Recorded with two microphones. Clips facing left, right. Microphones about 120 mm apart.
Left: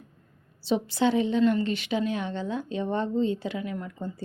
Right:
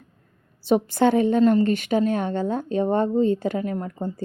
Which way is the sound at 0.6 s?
50° right (ahead or behind).